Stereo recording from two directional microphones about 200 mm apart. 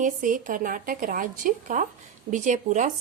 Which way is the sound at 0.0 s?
40° right (ahead or behind).